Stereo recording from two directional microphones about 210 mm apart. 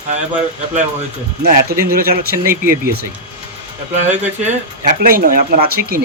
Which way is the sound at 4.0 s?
35° right (ahead or behind).